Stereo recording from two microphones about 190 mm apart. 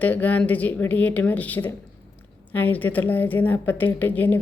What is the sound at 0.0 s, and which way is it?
A man's voice, 10° left (ahead or behind).